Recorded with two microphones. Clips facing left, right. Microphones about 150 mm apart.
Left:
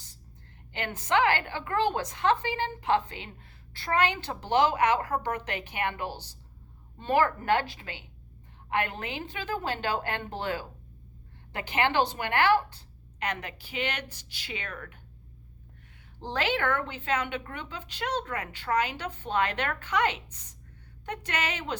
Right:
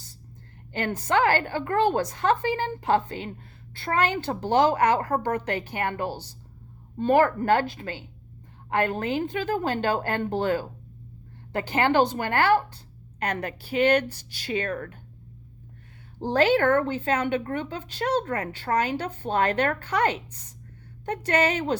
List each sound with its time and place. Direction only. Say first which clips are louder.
0.7 s a woman's voice: right 3 dB; 40° right (ahead or behind)
7.1 s a woman's voice: right 5 dB; 45° right (ahead or behind)
16.2 s a woman's voice: right 8 dB; 45° right (ahead or behind)